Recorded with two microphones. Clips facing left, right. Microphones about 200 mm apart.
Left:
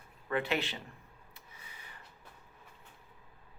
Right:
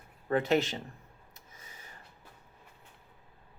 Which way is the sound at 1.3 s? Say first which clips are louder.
Right 1 dB; 45° right (ahead or behind).